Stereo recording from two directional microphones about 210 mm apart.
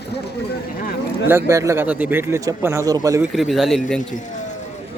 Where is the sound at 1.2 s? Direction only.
10° right (ahead or behind).